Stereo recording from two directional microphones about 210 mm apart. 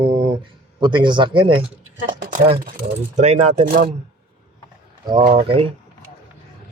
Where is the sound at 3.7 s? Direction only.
45° right (ahead or behind).